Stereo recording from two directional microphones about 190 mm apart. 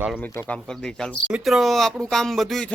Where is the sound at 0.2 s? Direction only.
10° left (ahead or behind).